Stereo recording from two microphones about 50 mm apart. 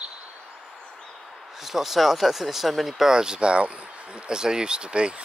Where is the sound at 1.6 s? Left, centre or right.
Centre.